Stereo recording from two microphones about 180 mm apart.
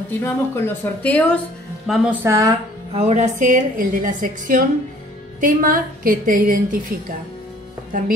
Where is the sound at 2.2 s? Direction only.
15° right (ahead or behind).